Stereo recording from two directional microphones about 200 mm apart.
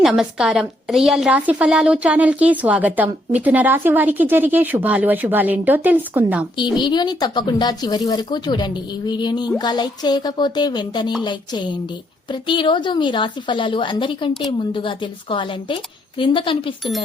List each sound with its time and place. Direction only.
0.0 s a woman's voice: centre (ahead or behind)
6.6 s a woman's voice: 20° left (ahead or behind)